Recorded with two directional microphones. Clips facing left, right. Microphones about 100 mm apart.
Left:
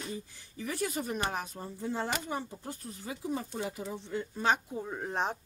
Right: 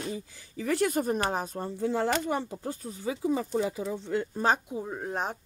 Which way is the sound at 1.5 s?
70° right (ahead or behind).